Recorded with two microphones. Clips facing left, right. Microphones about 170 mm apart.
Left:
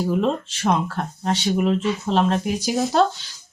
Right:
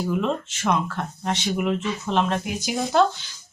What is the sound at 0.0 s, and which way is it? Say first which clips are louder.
Speech: left 3 dB; 35° left (ahead or behind).